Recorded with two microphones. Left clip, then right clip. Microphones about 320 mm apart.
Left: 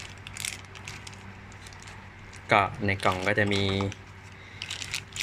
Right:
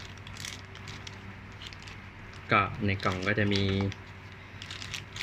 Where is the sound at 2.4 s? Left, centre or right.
Centre.